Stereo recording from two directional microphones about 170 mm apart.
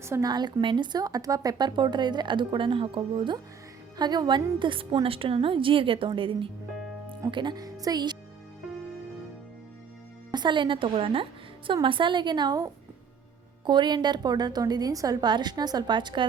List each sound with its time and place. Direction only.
0.0 s a woman's voice: 20° right (ahead or behind)
10.3 s speech: 25° right (ahead or behind)